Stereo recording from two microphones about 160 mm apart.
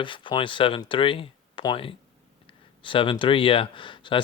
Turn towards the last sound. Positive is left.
turn(degrees=30)  # may be behind; listen again after turning